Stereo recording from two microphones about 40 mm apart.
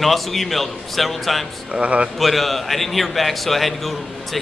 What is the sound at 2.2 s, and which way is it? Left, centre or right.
A man's voice, centre.